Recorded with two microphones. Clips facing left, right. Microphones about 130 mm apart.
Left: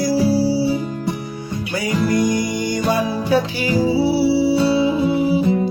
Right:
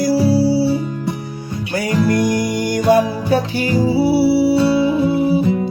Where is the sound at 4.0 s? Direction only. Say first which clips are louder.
Right 5 dB; 60° right (ahead or behind).